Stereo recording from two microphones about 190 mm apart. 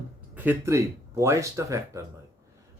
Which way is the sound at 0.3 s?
10° right (ahead or behind).